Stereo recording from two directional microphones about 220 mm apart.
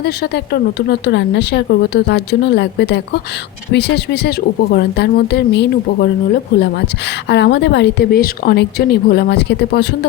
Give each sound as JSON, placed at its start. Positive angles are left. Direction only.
{"t": 0.0, "sound": "speech", "side_deg": 45}
{"t": 7.3, "sound": "speech", "side_deg": 50}